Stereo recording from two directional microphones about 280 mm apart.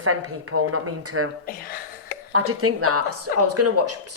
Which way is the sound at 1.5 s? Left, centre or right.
Left.